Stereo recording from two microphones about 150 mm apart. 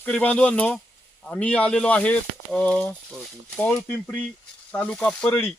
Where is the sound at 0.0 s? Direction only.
10° left (ahead or behind).